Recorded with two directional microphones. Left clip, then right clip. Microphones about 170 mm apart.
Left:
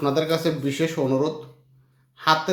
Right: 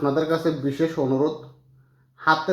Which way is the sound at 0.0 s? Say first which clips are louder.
Even; 35° left (ahead or behind).